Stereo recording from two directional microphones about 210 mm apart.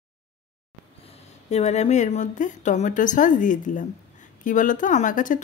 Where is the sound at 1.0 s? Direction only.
30° left (ahead or behind).